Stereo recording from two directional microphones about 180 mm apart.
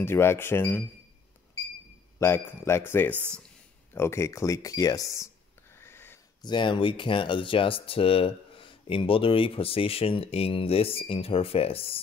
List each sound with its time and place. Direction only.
0.0 s speech: 15° left (ahead or behind)
2.1 s speech: 15° left (ahead or behind)
5.8 s wheeze: 15° left (ahead or behind)
6.4 s speech: 25° left (ahead or behind)